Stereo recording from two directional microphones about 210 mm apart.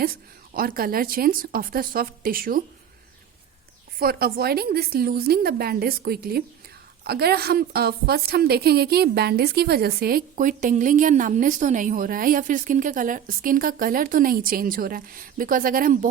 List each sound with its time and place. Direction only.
0.5 s a woman's voice: 45° right (ahead or behind)
3.9 s a woman's voice: 45° right (ahead or behind)